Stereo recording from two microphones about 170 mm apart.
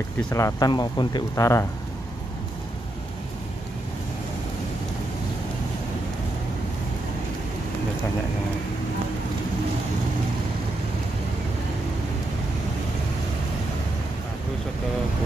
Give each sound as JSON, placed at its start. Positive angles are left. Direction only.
{"t": 0.3, "sound": "speech", "side_deg": 20}